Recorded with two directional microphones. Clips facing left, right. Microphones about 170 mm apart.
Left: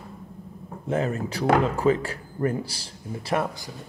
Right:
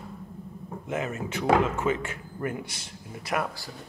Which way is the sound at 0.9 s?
35° left (ahead or behind).